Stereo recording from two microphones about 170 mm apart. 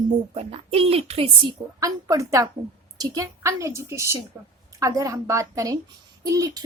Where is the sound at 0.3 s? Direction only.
35° right (ahead or behind).